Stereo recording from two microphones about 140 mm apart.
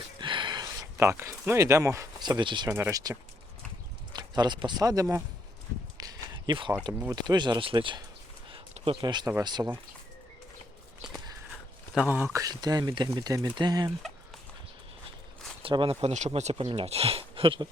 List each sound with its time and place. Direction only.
0.2 s speech: 35° right (ahead or behind)
2.6 s speech: 20° right (ahead or behind)
6.0 s a sound: 30° right (ahead or behind)
7.1 s speech: 30° right (ahead or behind)
8.5 s a sound: 40° right (ahead or behind)
9.0 s speech: 30° right (ahead or behind)
12.0 s speech: 15° right (ahead or behind)
15.6 s speech: 40° right (ahead or behind)